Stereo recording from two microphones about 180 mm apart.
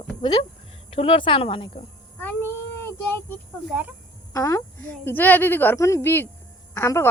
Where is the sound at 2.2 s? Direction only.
10° left (ahead or behind).